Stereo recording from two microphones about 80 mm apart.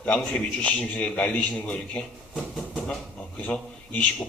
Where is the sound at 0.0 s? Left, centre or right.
Centre.